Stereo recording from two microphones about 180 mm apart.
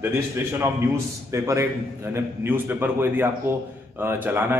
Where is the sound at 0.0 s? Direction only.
15° right (ahead or behind).